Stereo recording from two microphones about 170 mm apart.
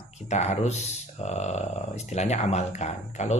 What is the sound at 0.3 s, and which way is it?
Speech, 40° left (ahead or behind).